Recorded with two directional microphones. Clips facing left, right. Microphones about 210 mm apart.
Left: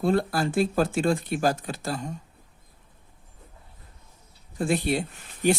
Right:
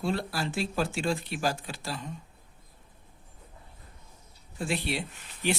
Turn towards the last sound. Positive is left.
turn(degrees=45)  # may be behind; listen again after turning